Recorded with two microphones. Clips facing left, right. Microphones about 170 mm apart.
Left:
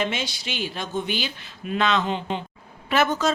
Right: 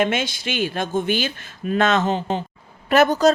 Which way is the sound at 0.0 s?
50° right (ahead or behind).